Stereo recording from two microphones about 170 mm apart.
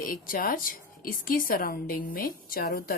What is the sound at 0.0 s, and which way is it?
A woman's voice, 55° left (ahead or behind).